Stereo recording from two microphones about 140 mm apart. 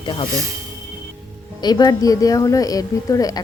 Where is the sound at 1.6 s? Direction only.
30° left (ahead or behind).